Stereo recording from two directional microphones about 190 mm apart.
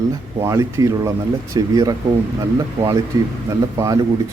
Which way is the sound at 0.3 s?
15° right (ahead or behind).